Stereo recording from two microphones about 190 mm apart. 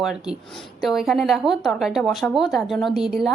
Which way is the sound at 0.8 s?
Centre (ahead or behind).